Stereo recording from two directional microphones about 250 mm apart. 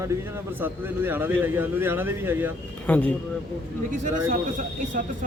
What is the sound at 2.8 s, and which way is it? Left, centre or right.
Speech, centre.